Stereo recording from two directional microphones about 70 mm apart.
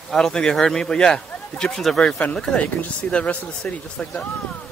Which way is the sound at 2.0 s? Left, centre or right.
Centre.